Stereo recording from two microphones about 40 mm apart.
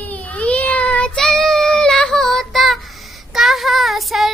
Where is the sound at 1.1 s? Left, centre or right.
Centre.